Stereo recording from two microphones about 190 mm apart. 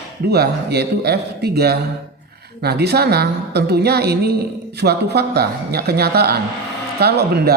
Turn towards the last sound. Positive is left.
turn(degrees=-55)  # may be behind; listen again after turning